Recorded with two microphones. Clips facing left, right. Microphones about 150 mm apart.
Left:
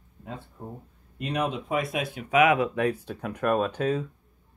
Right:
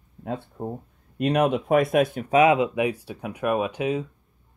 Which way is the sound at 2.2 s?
35° right (ahead or behind).